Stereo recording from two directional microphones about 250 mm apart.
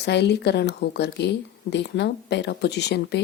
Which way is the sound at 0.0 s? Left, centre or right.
Left.